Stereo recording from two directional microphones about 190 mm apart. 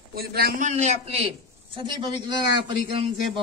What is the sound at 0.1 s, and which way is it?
A man's voice, 55° right (ahead or behind).